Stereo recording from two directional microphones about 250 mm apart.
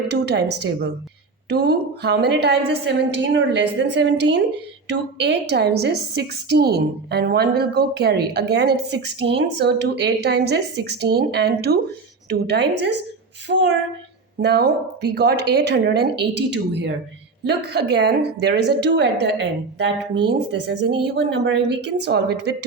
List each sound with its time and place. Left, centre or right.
0.1 s a woman's voice: right